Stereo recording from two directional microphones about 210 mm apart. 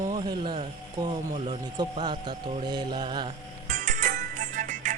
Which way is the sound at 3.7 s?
35° right (ahead or behind).